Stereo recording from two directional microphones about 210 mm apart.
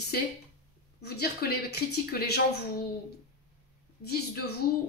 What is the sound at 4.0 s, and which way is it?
Speech, 50° left (ahead or behind).